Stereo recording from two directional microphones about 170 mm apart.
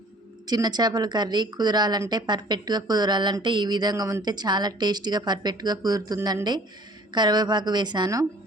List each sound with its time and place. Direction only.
0.4 s speech: 25° right (ahead or behind)